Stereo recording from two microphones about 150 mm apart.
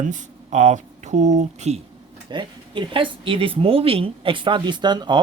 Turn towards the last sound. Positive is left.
turn(degrees=-30)  # may be behind; listen again after turning